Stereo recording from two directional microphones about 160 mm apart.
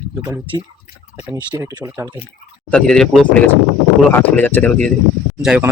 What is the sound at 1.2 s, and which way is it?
Speech, 25° right (ahead or behind).